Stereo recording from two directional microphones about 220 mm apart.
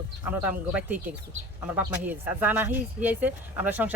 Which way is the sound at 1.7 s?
10° right (ahead or behind).